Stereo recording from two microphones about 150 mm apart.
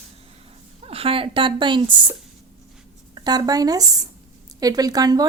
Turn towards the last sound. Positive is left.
turn(degrees=-25)  # may be behind; listen again after turning